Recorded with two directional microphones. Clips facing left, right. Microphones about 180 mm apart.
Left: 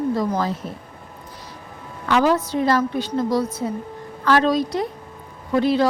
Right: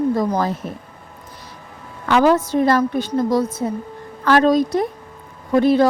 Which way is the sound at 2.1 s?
50° right (ahead or behind).